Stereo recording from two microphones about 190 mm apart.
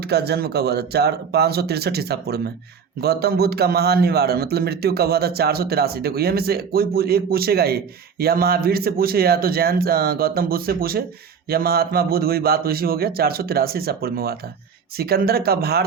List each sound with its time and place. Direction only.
0.1 s a man's voice: 60° right (ahead or behind)